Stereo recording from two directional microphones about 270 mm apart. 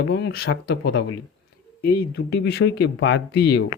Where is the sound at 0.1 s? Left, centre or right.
Left.